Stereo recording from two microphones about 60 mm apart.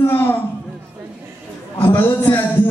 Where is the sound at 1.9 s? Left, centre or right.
Left.